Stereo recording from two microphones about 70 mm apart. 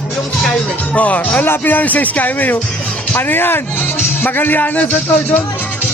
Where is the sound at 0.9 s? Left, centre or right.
Centre.